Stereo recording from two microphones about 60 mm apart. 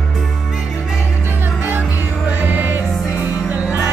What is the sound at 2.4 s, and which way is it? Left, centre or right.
Music, right.